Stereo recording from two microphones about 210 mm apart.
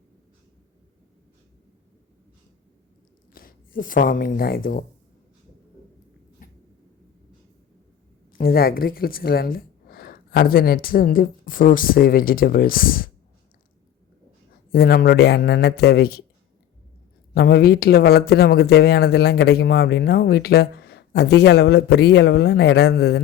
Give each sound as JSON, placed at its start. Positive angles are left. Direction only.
{"t": 3.3, "sound": "speech", "side_deg": 40}
{"t": 6.4, "sound": "a sound", "side_deg": 40}
{"t": 8.3, "sound": "speech", "side_deg": 45}
{"t": 14.7, "sound": "speech", "side_deg": 45}
{"t": 17.3, "sound": "speech", "side_deg": 45}